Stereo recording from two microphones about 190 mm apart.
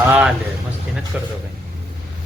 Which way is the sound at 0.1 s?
5° right (ahead or behind).